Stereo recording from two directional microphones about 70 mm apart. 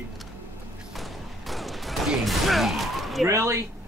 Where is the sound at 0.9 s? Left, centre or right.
Centre.